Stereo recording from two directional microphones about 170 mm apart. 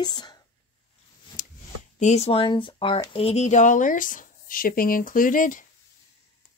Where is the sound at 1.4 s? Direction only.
55° left (ahead or behind).